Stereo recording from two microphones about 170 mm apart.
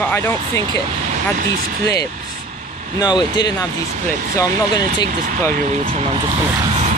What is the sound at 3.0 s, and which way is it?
Speech, 25° left (ahead or behind).